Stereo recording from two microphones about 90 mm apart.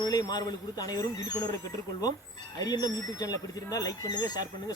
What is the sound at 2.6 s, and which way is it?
Speech, 45° left (ahead or behind).